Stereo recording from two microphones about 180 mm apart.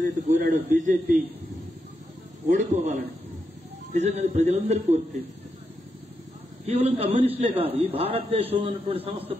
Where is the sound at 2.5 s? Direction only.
40° right (ahead or behind).